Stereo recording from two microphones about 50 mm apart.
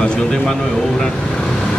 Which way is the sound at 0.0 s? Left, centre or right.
Centre.